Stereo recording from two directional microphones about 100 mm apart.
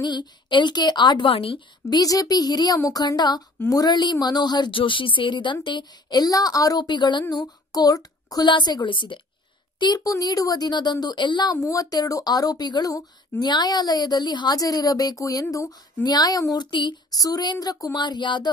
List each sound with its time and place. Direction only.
0.0 s a woman's voice: 45° left (ahead or behind)
1.3 s a woman's voice: 65° left (ahead or behind)
1.9 s a child's voice: 40° left (ahead or behind)
3.5 s a woman's voice: 30° left (ahead or behind)
3.8 s a woman's voice: 45° left (ahead or behind)
9.8 s a woman's voice: 40° left (ahead or behind)
11.5 s a child's voice: 35° left (ahead or behind)
17.9 s a woman's voice: 50° left (ahead or behind)